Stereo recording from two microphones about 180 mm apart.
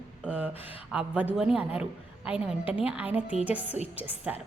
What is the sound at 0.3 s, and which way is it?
A woman's voice, 10° right (ahead or behind).